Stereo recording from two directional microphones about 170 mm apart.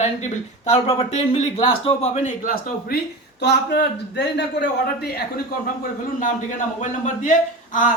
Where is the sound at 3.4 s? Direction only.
85° left.